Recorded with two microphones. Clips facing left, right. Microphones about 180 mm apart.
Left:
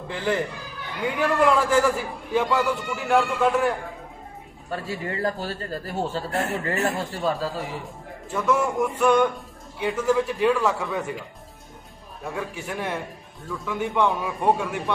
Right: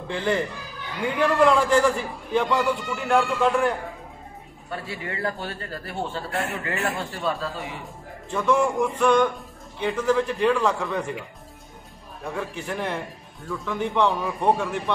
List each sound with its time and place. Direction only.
0.1 s a man's voice: 5° left (ahead or behind)
4.6 s a man's voice: 40° left (ahead or behind)
7.8 s a man's voice: 5° left (ahead or behind)
12.2 s speech: 5° left (ahead or behind)